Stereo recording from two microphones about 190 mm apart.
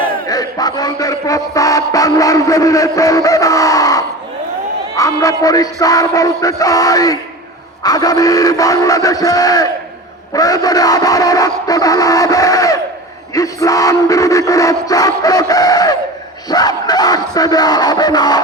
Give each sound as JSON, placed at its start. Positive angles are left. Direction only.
{"t": 0.0, "sound": "speech", "side_deg": 20}
{"t": 4.9, "sound": "music", "side_deg": 15}